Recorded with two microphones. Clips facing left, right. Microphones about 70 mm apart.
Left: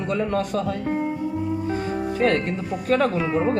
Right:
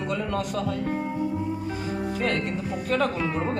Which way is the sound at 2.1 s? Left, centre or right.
Left.